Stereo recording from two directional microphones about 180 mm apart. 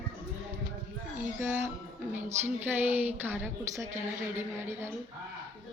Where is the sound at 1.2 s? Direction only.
15° right (ahead or behind).